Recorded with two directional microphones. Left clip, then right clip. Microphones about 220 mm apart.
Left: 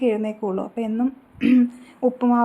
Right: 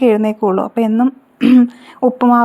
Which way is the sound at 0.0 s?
30° right (ahead or behind).